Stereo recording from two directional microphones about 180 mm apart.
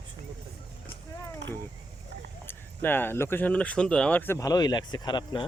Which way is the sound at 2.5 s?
10° left (ahead or behind).